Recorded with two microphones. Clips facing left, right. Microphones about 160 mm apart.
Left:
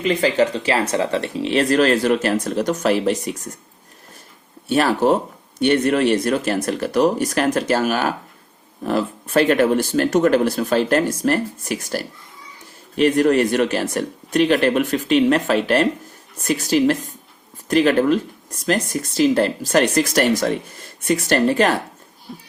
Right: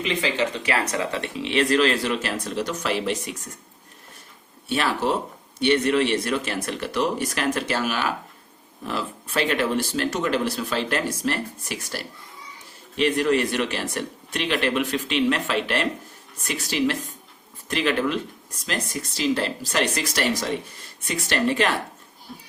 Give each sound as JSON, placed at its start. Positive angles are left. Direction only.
{"t": 0.0, "sound": "speech", "side_deg": 40}
{"t": 4.7, "sound": "speech", "side_deg": 45}